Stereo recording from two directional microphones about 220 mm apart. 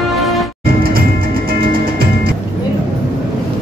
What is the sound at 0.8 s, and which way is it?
Music, 40° right (ahead or behind).